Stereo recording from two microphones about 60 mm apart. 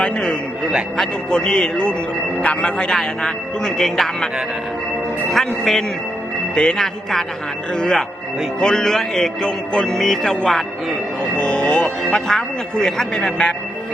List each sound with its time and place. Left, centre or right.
0.0 s speech: centre
0.6 s a man's voice: centre
0.9 s speech: centre
5.3 s speech: centre
6.7 s a man's voice: centre